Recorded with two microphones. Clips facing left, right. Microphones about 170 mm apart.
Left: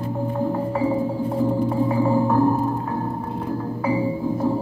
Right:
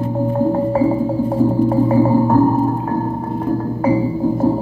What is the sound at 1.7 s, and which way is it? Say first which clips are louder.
Music: right 6 dB; 40° right (ahead or behind).